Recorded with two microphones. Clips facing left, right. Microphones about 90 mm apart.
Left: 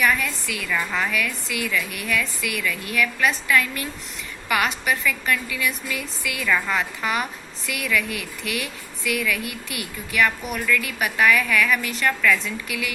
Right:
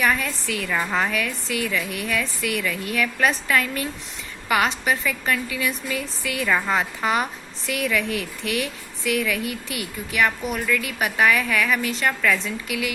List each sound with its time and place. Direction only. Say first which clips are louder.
0.0 s a woman's voice: even; 30° right (ahead or behind)